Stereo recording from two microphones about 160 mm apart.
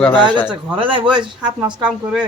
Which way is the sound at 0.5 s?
35° right (ahead or behind).